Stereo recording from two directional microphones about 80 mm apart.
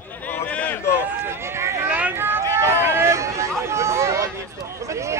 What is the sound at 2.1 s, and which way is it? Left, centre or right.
Run, right.